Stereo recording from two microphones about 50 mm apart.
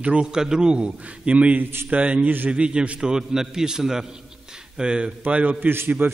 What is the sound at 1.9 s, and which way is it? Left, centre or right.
A man's voice, right.